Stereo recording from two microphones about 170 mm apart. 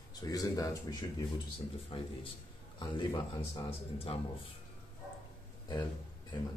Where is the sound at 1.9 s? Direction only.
35° left (ahead or behind).